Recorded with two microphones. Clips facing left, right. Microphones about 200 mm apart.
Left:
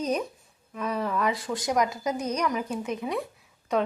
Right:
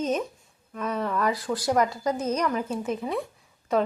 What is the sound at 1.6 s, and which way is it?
A woman's voice, 15° left (ahead or behind).